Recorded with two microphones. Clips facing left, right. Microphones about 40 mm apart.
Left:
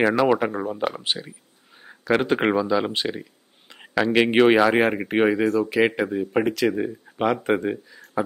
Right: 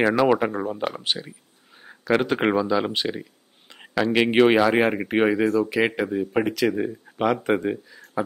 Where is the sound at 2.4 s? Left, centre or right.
Centre.